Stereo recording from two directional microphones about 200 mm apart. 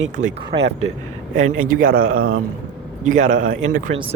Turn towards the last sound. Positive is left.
turn(degrees=-40)  # may be behind; listen again after turning